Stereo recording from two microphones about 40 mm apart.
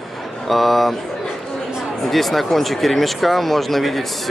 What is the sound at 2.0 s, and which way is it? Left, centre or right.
Speech, centre.